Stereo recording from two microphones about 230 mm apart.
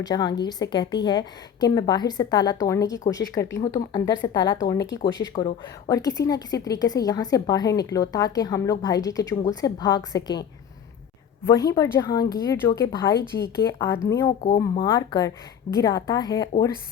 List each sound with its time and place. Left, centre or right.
0.0 s a woman's voice: centre
11.4 s a woman's voice: centre
14.4 s a woman's voice: left